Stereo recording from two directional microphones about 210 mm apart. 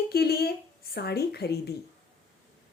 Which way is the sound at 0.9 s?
50° left (ahead or behind).